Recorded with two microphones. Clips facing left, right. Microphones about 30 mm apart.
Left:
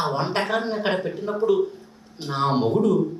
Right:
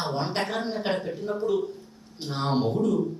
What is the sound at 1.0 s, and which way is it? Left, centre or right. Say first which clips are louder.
A woman's voice: left 5 dB; centre.